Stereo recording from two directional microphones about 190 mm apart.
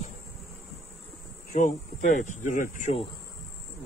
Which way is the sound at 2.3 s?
45° left (ahead or behind).